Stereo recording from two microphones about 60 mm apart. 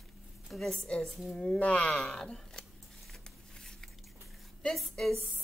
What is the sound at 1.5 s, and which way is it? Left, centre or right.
Speech, left.